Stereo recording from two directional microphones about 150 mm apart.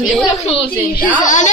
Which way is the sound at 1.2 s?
55° left (ahead or behind).